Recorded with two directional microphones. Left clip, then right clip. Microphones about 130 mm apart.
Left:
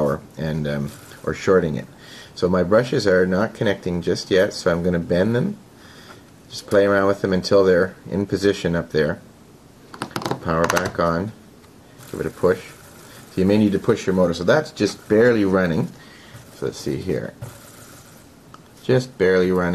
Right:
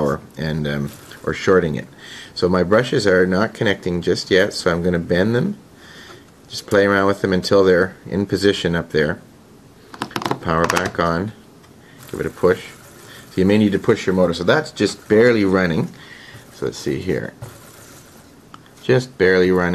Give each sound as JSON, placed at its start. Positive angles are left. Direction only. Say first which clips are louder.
{"t": 0.0, "sound": "speech", "louder": "right 1 dB", "side_deg": -20}
{"t": 6.7, "sound": "speech", "louder": "right 1 dB", "side_deg": -25}
{"t": 9.9, "sound": "typing", "louder": "right 3 dB", "side_deg": -10}
{"t": 10.6, "sound": "speech", "louder": "even", "side_deg": -10}
{"t": 11.0, "sound": "speech", "louder": "right 1 dB", "side_deg": -20}
{"t": 18.9, "sound": "speech", "louder": "right 2 dB", "side_deg": -20}